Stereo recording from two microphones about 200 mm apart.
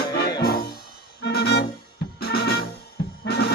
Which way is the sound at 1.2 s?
55° left (ahead or behind).